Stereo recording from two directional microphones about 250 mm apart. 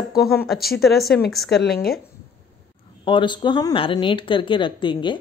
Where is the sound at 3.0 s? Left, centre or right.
Centre.